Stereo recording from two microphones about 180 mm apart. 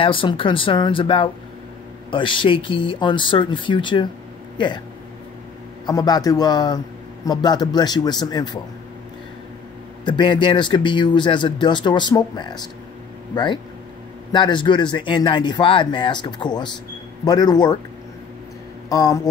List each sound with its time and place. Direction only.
0.0 s speech: 30° left (ahead or behind)
5.9 s speech: 20° left (ahead or behind)
10.0 s speech: 25° left (ahead or behind)
18.9 s speech: 20° left (ahead or behind)